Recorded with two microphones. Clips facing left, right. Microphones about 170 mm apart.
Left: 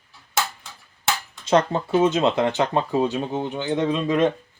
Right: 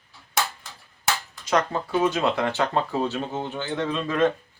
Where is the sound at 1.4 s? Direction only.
25° left (ahead or behind).